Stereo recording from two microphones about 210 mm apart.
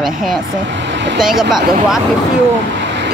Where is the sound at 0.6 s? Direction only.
60° right (ahead or behind).